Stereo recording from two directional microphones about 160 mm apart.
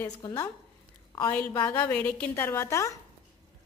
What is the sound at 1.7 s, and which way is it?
Speech, 10° left (ahead or behind).